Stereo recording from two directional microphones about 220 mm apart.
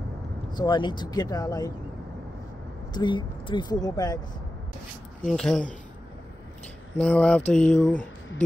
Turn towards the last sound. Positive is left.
turn(degrees=0)  # may be behind; listen again after turning